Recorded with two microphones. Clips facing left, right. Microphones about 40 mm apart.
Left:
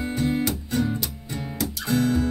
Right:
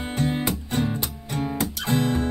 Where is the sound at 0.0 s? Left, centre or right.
Right.